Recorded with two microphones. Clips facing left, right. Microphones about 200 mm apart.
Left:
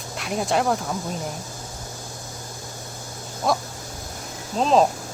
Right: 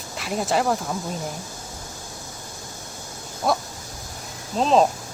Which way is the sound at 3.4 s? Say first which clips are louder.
Even; 5° right (ahead or behind).